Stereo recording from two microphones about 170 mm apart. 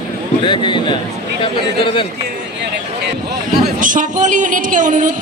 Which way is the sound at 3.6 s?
50° right (ahead or behind).